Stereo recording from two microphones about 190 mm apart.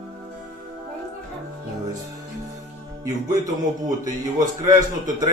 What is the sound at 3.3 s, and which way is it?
A man's voice, 20° right (ahead or behind).